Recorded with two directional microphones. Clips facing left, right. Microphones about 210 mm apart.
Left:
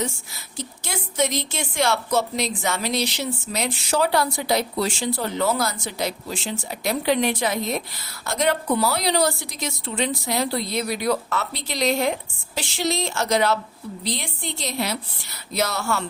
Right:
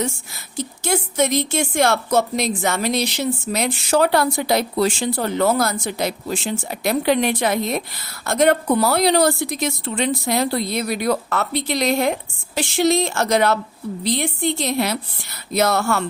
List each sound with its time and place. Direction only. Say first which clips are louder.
0.5 s a woman's voice: right 9 dB; 50° right (ahead or behind)